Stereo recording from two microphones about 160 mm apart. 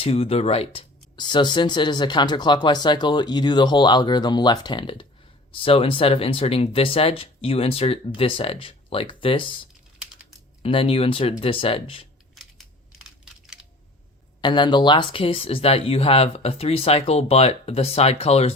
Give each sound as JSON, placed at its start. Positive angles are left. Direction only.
{"t": 0.0, "sound": "speech", "side_deg": 40}
{"t": 10.6, "sound": "speech", "side_deg": 35}
{"t": 12.3, "sound": "crushing", "side_deg": 0}
{"t": 14.4, "sound": "speech", "side_deg": 30}